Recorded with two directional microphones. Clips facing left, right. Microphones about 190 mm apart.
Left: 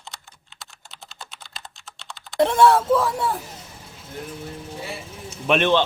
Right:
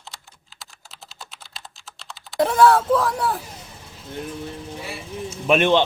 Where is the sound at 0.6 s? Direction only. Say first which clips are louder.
Even; centre (ahead or behind).